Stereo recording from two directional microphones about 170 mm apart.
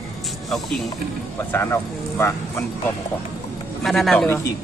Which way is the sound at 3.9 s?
Centre (ahead or behind).